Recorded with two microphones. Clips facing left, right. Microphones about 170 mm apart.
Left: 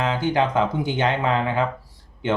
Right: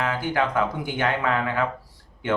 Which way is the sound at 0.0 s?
20° left (ahead or behind).